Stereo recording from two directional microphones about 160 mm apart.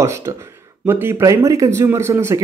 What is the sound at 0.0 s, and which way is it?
Speech, 20° right (ahead or behind).